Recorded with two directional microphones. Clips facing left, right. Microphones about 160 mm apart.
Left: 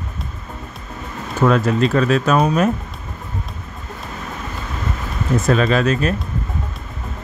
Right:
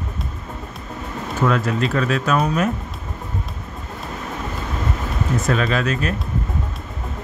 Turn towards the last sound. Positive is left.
turn(degrees=30)  # may be behind; listen again after turning